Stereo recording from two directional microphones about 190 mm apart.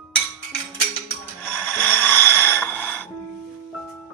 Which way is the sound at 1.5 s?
5° left (ahead or behind).